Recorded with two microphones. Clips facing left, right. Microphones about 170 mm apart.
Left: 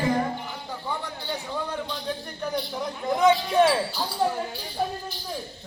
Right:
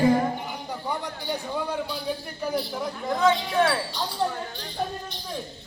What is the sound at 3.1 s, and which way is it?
Speech, 20° left (ahead or behind).